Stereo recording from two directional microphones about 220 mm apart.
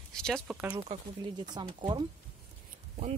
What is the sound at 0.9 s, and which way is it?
Speech, 20° right (ahead or behind).